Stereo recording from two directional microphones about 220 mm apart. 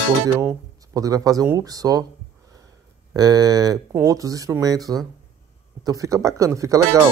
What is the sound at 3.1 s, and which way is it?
Speech, 15° right (ahead or behind).